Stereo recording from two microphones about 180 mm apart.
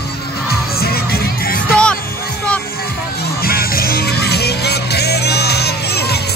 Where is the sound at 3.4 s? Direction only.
55° left (ahead or behind).